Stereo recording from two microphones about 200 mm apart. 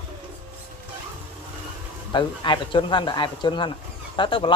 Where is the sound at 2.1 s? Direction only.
25° left (ahead or behind).